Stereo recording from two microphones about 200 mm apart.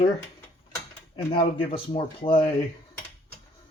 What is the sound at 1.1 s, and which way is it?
Speech, 25° left (ahead or behind).